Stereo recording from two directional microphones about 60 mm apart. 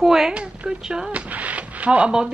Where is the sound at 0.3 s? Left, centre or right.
Centre.